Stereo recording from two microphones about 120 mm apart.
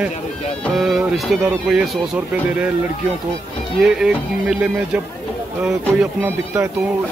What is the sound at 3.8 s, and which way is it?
Speech, 5° right (ahead or behind).